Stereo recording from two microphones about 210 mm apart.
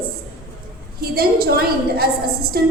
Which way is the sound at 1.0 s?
45° right (ahead or behind).